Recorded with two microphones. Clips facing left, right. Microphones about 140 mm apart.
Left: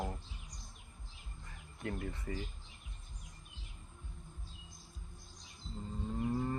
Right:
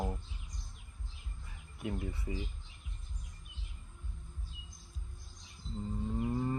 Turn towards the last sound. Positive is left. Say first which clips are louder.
# right 2 dB
turn(degrees=-5)  # may be behind; listen again after turning